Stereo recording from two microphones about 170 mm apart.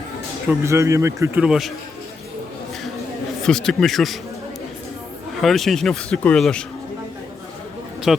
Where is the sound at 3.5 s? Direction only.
5° left (ahead or behind).